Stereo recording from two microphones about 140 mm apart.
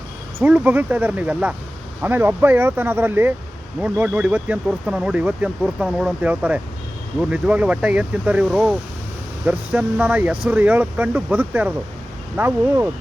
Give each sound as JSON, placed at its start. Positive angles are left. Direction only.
{"t": 0.3, "sound": "speech", "side_deg": -15}